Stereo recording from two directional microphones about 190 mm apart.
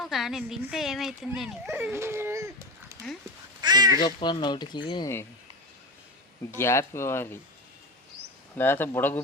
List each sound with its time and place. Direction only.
0.0 s speech: centre (ahead or behind)
1.7 s speech: 10° right (ahead or behind)
3.6 s speech: 20° right (ahead or behind)
4.0 s speech: 25° left (ahead or behind)
6.5 s speech: 15° left (ahead or behind)
8.5 s speech: 10° left (ahead or behind)